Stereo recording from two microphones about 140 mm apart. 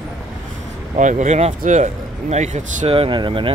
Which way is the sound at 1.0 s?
60° right (ahead or behind).